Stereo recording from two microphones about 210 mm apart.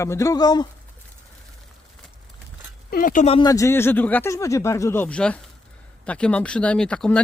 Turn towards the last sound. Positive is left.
turn(degrees=5)  # may be behind; listen again after turning